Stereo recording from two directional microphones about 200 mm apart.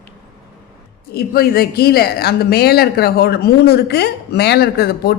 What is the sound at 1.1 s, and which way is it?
A woman's voice, 50° left (ahead or behind).